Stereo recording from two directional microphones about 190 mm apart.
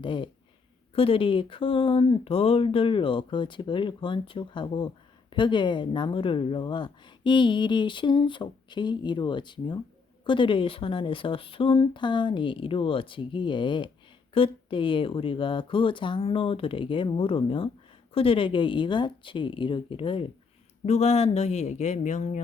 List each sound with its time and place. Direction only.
0.0 s speech: 25° left (ahead or behind)